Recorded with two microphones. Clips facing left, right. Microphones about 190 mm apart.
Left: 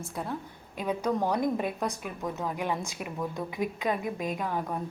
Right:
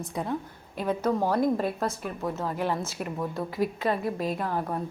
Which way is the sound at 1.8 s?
5° right (ahead or behind).